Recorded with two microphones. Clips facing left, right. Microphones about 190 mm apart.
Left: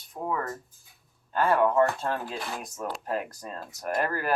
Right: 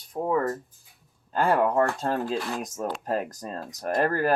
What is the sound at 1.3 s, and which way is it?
Speech, 40° right (ahead or behind).